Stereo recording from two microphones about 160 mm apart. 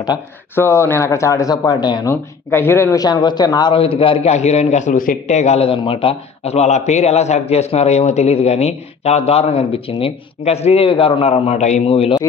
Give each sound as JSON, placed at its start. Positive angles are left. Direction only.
{"t": 0.6, "sound": "a man's voice", "side_deg": 15}